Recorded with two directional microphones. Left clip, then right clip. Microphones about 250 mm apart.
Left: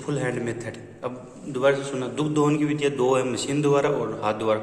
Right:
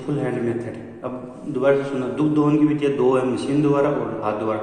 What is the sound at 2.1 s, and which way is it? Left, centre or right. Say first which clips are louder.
A man's voice: right 4 dB; left.